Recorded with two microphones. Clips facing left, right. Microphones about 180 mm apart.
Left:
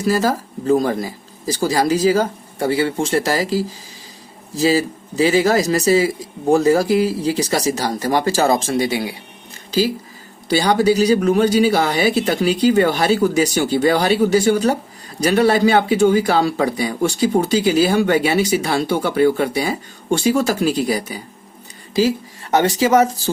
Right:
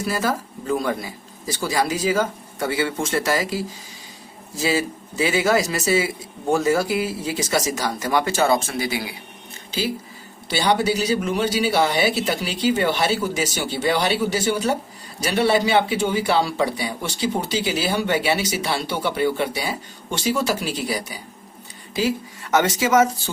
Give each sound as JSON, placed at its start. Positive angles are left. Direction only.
{"t": 0.0, "sound": "speech", "side_deg": 40}
{"t": 10.5, "sound": "speech", "side_deg": 45}